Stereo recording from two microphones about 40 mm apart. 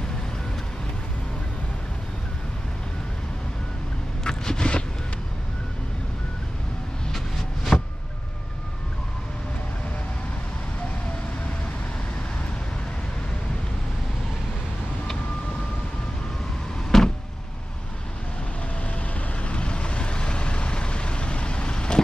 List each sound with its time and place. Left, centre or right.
4.2 s vehicle: centre
7.7 s vehicle: centre
16.9 s a sound: centre
19.1 s vehicle: left